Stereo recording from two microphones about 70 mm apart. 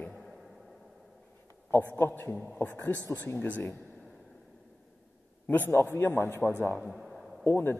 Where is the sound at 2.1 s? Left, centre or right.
Left.